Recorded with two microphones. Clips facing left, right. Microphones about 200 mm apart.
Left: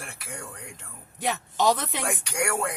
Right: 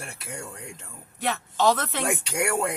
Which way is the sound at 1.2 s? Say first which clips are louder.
Right 1 dB; 15° left (ahead or behind).